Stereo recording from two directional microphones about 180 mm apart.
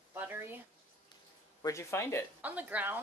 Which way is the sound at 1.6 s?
15° left (ahead or behind).